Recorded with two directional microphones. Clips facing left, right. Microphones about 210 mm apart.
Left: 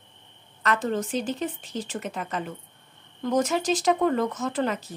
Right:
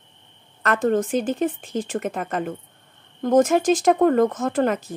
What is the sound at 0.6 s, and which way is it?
A woman's voice, 50° right (ahead or behind).